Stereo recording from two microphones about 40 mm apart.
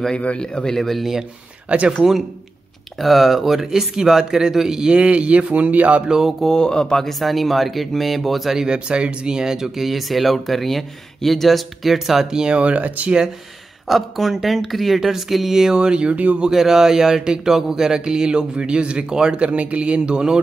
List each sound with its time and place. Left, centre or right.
0.1 s speech: left
0.7 s speech: centre
1.7 s speech: right
3.0 s speech: centre
4.9 s speech: right
6.0 s speech: centre
6.4 s speech: centre
7.1 s speech: centre
8.5 s speech: right; by 12.3 s centre
12.3 s speech: centre
12.5 s speech: right
13.8 s speech: centre; by 16.4 s right
16.4 s speech: centre
19.4 s speech: right